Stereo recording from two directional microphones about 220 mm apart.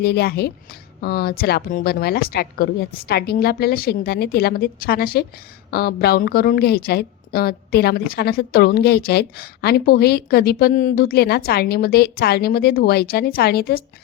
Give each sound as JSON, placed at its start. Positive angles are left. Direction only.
{"t": 0.0, "sound": "a woman's voice", "side_deg": 45}